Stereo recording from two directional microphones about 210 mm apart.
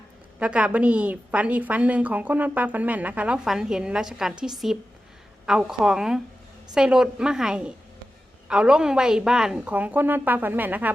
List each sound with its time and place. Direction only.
0.3 s a woman's voice: 5° right (ahead or behind)